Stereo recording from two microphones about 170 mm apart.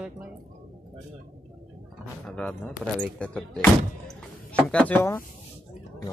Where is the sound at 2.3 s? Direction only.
10° left (ahead or behind).